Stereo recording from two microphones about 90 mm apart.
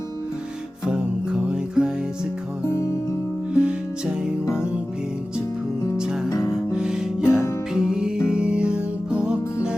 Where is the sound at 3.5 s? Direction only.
10° right (ahead or behind).